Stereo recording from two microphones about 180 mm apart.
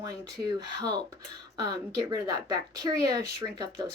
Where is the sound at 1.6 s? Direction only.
20° right (ahead or behind).